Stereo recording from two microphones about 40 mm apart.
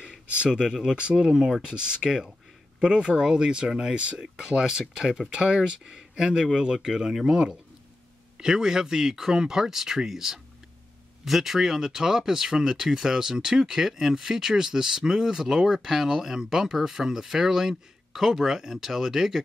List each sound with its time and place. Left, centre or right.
0.4 s speech: centre